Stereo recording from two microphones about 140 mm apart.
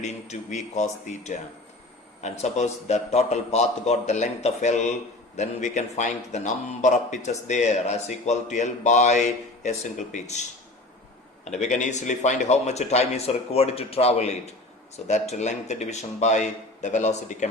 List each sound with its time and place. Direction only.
0.0 s a man's voice: 55° left (ahead or behind)
11.6 s a man's voice: 60° left (ahead or behind)